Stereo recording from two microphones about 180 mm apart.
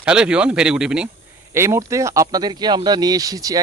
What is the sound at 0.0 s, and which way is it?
Speech, 5° right (ahead or behind).